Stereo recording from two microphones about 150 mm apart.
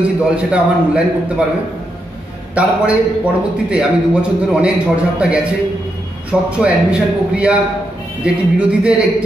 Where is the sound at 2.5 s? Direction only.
10° right (ahead or behind).